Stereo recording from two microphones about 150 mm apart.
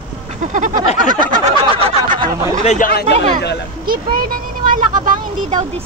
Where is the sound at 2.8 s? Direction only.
90° left.